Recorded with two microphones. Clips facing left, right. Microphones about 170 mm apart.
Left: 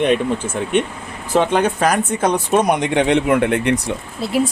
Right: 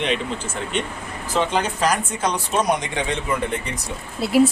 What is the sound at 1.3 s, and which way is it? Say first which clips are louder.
Speech: left 6 dB; 55° left (ahead or behind).